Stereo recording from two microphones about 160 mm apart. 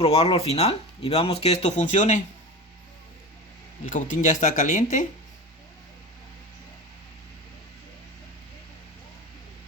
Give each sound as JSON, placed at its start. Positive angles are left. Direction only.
{"t": 0.0, "sound": "speech", "side_deg": 40}
{"t": 3.8, "sound": "speech", "side_deg": 55}